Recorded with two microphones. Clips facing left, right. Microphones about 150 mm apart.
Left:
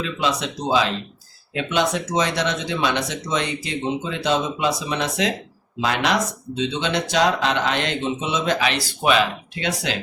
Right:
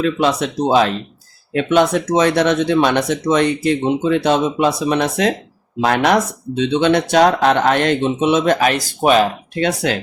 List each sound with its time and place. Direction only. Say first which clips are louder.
0.0 s speech: right 7 dB; 55° right (ahead or behind)